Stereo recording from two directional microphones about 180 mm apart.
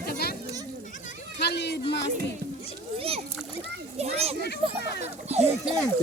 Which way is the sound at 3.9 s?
35° right (ahead or behind).